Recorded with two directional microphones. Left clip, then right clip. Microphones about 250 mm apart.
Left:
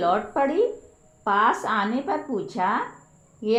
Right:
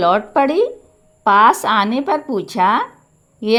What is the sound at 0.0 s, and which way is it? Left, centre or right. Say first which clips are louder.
A woman's voice: right 8 dB; right.